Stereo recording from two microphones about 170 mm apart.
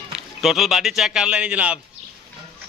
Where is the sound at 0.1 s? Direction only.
Centre (ahead or behind).